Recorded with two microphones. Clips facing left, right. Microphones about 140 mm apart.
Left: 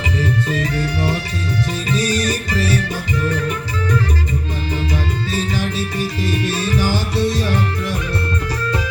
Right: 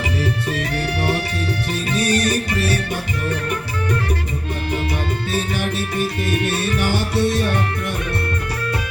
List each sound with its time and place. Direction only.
0.2 s music: 65° right (ahead or behind)
5.3 s music: 60° right (ahead or behind)